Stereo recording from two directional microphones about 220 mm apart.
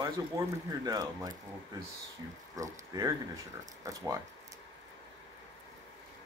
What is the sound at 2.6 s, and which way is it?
Speech, 15° right (ahead or behind).